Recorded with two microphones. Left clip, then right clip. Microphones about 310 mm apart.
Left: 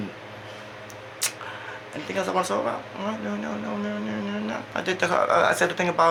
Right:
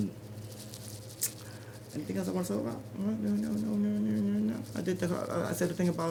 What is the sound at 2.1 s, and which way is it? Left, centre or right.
Speech, right.